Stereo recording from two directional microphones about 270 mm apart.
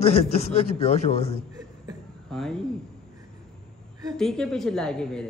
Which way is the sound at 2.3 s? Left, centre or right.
Centre.